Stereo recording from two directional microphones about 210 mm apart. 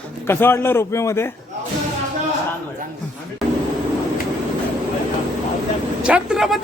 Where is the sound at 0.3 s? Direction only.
10° left (ahead or behind).